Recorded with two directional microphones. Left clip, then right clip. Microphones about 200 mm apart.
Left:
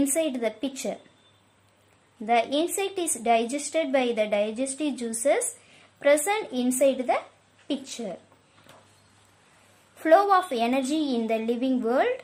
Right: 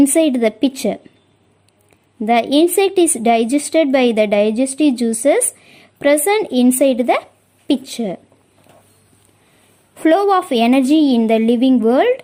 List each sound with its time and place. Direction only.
0.0 s a woman's voice: 45° right (ahead or behind)
2.2 s a woman's voice: 40° right (ahead or behind)
10.0 s a woman's voice: 35° right (ahead or behind)